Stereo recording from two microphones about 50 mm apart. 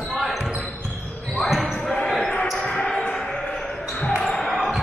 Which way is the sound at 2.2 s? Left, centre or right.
Left.